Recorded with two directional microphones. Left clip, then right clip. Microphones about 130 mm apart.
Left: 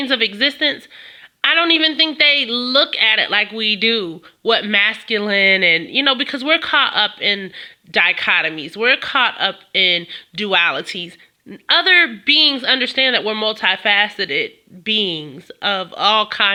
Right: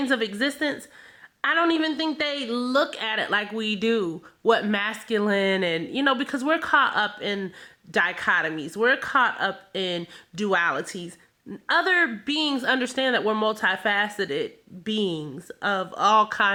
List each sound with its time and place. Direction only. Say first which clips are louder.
0.1 s a woman's voice: left 12 dB; 10° left (ahead or behind)
12.2 s speech: left 11 dB; centre (ahead or behind)